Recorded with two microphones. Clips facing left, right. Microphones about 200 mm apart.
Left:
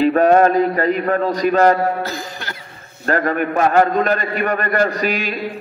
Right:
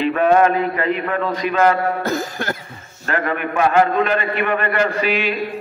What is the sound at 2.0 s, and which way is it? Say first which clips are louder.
Cough: right 6 dB; 50° right (ahead or behind).